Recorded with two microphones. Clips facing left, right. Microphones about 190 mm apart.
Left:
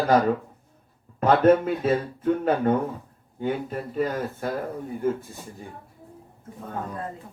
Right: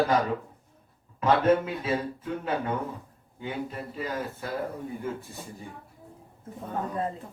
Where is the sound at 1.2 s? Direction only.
50° left (ahead or behind).